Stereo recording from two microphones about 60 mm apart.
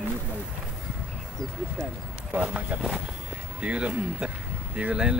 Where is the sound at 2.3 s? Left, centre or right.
Right.